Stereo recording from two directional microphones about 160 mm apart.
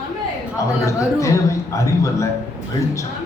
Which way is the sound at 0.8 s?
20° left (ahead or behind).